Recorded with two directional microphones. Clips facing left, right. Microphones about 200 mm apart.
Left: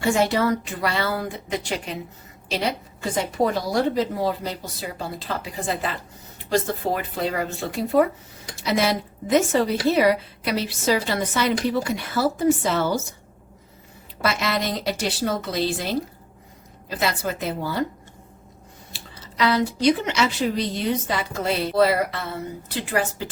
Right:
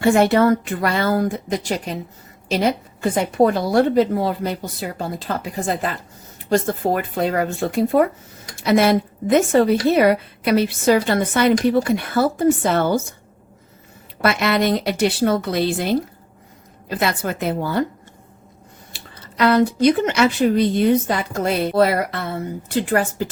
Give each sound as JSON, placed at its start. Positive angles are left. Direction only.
{"t": 0.0, "sound": "speech", "side_deg": -55}
{"t": 2.5, "sound": "a woman's voice", "side_deg": -50}
{"t": 14.2, "sound": "a woman's voice", "side_deg": -60}
{"t": 17.0, "sound": "a woman's voice", "side_deg": -55}
{"t": 19.2, "sound": "speech", "side_deg": -55}